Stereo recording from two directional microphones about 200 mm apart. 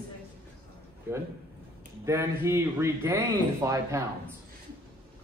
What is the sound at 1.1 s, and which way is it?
A man's voice, 10° right (ahead or behind).